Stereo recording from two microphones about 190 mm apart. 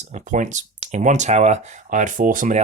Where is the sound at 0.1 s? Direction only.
40° right (ahead or behind).